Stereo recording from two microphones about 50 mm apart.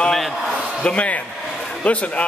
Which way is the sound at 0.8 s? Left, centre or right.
Left.